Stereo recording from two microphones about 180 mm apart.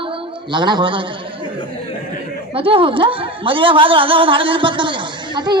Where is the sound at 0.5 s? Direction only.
25° right (ahead or behind).